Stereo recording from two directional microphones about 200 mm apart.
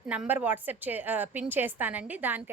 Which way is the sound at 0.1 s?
5° right (ahead or behind).